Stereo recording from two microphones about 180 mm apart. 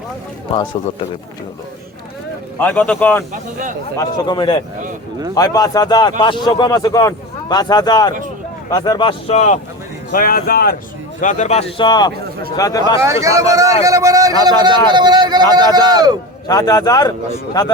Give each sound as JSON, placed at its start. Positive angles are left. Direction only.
{"t": 2.6, "sound": "speech", "side_deg": 10}
{"t": 3.3, "sound": "speech", "side_deg": -45}
{"t": 3.9, "sound": "speech", "side_deg": 25}
{"t": 10.1, "sound": "speech", "side_deg": 55}
{"t": 11.2, "sound": "a man's voice", "side_deg": 40}
{"t": 13.0, "sound": "a man's voice", "side_deg": -15}
{"t": 16.5, "sound": "speech", "side_deg": 20}